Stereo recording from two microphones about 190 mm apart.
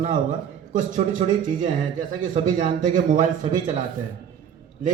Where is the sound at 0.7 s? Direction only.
45° right (ahead or behind).